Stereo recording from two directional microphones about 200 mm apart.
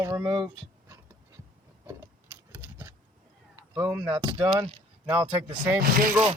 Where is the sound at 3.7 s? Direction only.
5° right (ahead or behind).